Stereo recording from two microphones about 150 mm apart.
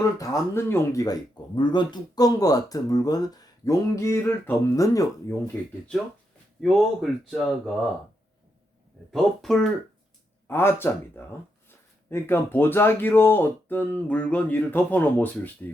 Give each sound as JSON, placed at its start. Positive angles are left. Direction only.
{"t": 0.0, "sound": "speech", "side_deg": 20}
{"t": 6.6, "sound": "speech", "side_deg": 0}
{"t": 9.1, "sound": "speech", "side_deg": 0}
{"t": 10.4, "sound": "speech", "side_deg": 15}